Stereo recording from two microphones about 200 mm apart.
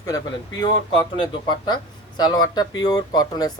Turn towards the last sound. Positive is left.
turn(degrees=20)  # may be behind; listen again after turning